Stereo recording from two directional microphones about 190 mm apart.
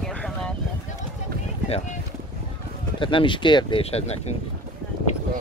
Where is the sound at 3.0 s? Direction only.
25° left (ahead or behind).